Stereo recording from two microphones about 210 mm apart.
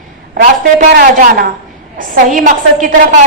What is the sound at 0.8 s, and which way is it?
A woman's voice, 45° right (ahead or behind).